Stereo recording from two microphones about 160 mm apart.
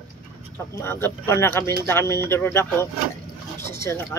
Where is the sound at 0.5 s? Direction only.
15° left (ahead or behind).